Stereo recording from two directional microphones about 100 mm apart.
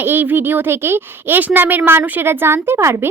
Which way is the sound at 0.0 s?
20° right (ahead or behind).